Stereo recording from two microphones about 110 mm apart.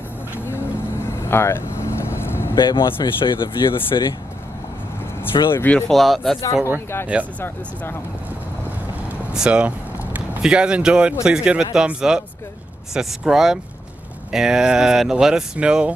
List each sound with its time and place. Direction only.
1.3 s vehicle: 20° left (ahead or behind)
2.5 s speech: 45° left (ahead or behind)
5.5 s speech: 15° left (ahead or behind)
5.9 s speech: centre (ahead or behind)
7.3 s speech: 20° left (ahead or behind)
9.3 s speech: 10° right (ahead or behind)